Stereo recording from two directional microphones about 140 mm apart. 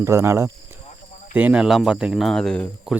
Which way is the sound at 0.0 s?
20° right (ahead or behind).